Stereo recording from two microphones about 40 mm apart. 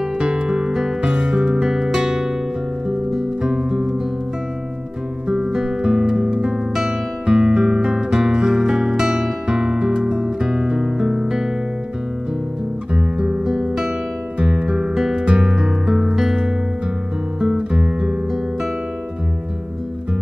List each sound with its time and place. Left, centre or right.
0.2 s music: right; by 2.3 s centre
3.4 s music: right
5.3 s music: centre
6.7 s guitar: centre
12.9 s guitar: right
13.4 s guitar: centre
14.4 s guitar: right
15.0 s music: centre
15.2 s music: right
17.4 s guitar: centre